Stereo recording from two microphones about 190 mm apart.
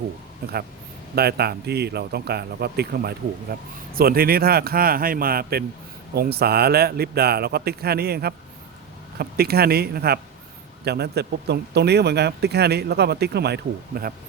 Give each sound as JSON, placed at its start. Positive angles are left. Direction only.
{"t": 1.1, "sound": "a man's voice", "side_deg": -55}